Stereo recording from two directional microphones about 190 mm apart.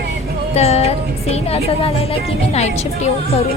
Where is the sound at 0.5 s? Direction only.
35° left (ahead or behind).